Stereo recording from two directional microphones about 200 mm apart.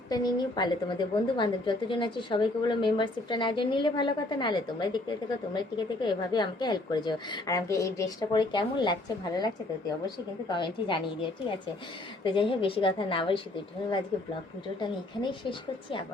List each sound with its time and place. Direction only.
0.1 s a woman's voice: 20° left (ahead or behind)
10.5 s a woman's voice: 25° left (ahead or behind)
12.2 s a woman's voice: 25° left (ahead or behind)
14.8 s a woman's voice: 25° left (ahead or behind)